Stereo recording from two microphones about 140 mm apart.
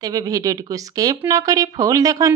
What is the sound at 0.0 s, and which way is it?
A woman's voice, 25° right (ahead or behind).